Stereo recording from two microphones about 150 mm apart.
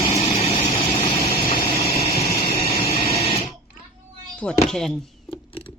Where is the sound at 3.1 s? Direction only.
45° left (ahead or behind).